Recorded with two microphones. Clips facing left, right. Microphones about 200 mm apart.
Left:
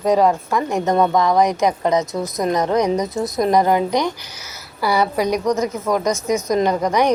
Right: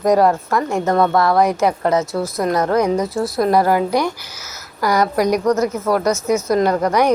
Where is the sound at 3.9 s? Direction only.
10° right (ahead or behind).